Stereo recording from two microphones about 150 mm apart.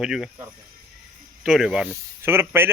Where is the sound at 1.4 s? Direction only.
5° right (ahead or behind).